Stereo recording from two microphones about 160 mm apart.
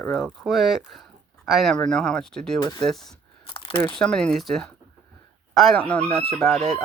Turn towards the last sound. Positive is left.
turn(degrees=0)  # may be behind; listen again after turning